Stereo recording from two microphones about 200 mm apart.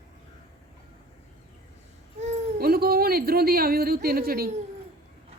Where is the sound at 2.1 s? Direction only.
35° right (ahead or behind).